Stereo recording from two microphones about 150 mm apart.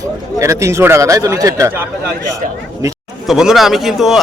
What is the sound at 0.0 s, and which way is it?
Speech, 20° right (ahead or behind).